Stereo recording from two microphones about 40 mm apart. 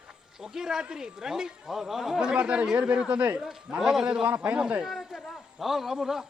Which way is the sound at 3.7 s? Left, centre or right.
Centre.